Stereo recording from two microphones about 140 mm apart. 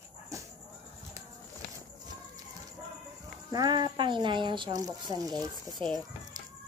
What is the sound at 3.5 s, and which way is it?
Speech, 30° right (ahead or behind).